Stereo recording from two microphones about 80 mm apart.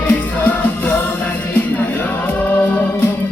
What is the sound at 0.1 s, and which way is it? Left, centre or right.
Music, centre.